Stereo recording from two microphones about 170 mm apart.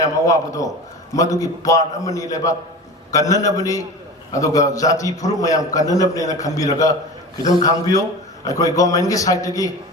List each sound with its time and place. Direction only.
0.0 s a man's voice: 20° left (ahead or behind)